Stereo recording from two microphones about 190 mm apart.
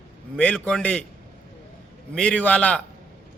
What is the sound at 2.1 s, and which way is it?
Speech, 5° left (ahead or behind).